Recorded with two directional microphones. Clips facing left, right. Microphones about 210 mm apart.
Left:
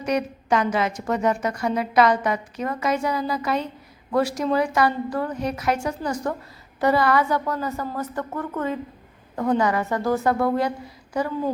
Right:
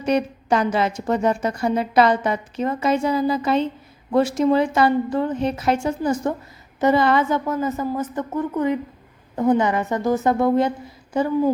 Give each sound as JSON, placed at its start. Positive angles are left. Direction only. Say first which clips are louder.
{"t": 0.0, "sound": "a woman's voice", "louder": "right 3 dB", "side_deg": -30}